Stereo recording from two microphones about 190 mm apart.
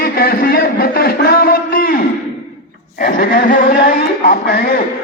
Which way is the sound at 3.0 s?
50° left (ahead or behind).